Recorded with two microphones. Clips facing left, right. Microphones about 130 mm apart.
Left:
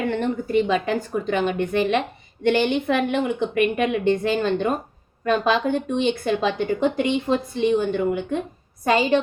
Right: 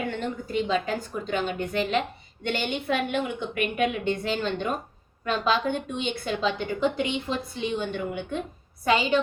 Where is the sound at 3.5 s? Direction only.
50° left (ahead or behind).